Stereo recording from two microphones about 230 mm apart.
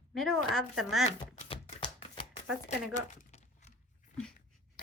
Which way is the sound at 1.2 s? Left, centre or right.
Left.